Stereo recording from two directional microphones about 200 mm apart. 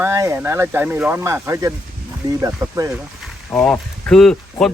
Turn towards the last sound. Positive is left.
turn(degrees=5)  # may be behind; listen again after turning